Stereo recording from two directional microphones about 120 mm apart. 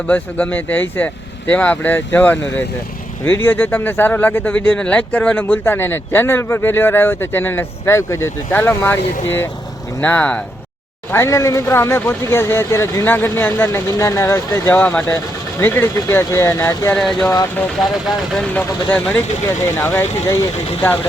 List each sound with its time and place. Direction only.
0.1 s speech: 10° left (ahead or behind)
16.9 s speech: 5° left (ahead or behind)
18.3 s speech: 10° left (ahead or behind)